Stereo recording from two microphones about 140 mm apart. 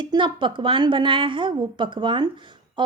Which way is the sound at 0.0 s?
35° right (ahead or behind).